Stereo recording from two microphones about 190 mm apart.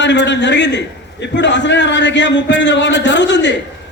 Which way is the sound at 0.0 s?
65° left (ahead or behind).